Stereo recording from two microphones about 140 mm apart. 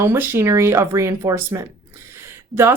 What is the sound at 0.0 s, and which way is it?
Speech, 20° right (ahead or behind).